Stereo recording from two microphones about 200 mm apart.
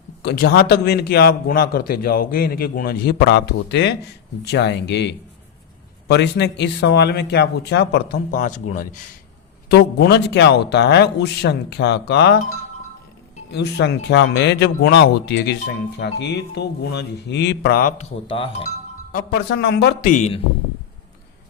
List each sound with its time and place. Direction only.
0.2 s a man's voice: 55° left (ahead or behind)
8.4 s speech: 40° left (ahead or behind)
9.6 s speech: 55° left (ahead or behind)
13.5 s speech: 60° left (ahead or behind); by 18.4 s 30° left (ahead or behind)
19.1 s a man's voice: 50° left (ahead or behind)
20.1 s speech: 35° left (ahead or behind)